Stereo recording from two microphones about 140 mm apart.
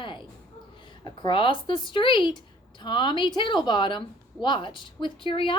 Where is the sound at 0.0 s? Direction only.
35° left (ahead or behind).